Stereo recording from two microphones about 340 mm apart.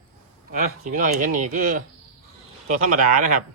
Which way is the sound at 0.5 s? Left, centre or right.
Right.